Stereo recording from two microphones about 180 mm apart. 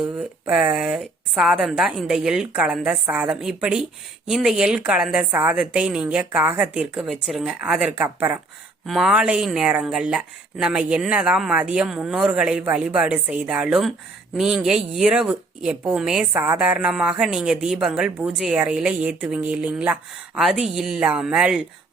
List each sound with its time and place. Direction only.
0.2 s speech: 10° right (ahead or behind)